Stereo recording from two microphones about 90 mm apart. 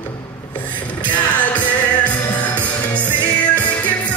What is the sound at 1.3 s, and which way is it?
Music, 15° left (ahead or behind).